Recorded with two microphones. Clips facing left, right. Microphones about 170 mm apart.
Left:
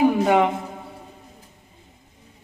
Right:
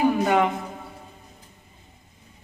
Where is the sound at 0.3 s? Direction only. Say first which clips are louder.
Left 3 dB; 10° left (ahead or behind).